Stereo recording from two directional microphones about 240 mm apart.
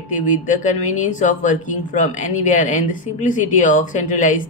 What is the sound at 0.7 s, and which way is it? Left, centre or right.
Speech, left.